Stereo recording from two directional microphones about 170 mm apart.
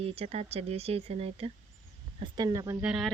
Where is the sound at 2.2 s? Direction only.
25° right (ahead or behind).